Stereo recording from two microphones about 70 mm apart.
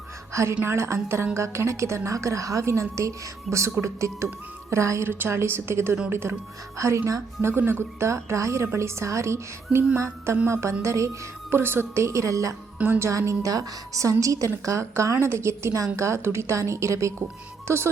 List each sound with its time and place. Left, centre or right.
0.6 s a woman's voice: right
6.7 s a woman's voice: right
7.4 s a woman's voice: right
11.5 s a woman's voice: right